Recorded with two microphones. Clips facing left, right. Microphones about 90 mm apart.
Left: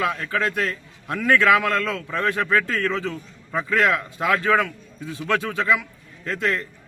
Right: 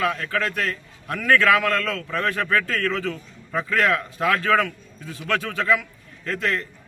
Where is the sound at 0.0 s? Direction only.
25° left (ahead or behind).